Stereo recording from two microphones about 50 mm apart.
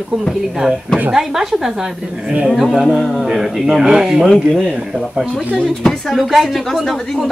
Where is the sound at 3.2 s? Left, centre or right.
Centre.